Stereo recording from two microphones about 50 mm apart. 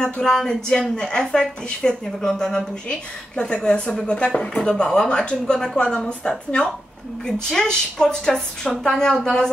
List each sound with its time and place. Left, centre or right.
0.0 s speech: centre